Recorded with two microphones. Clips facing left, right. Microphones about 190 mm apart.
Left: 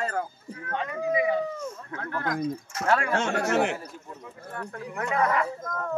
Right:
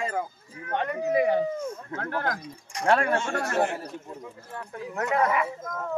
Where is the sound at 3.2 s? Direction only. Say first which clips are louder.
Left 2 dB; 70° left (ahead or behind).